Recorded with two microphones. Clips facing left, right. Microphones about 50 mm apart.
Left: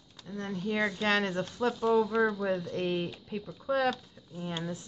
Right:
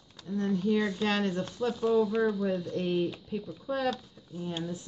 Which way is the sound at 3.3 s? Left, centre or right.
Left.